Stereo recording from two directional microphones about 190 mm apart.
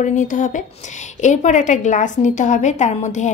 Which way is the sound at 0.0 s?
40° left (ahead or behind).